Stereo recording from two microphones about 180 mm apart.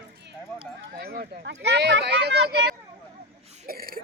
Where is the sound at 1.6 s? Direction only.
70° right (ahead or behind).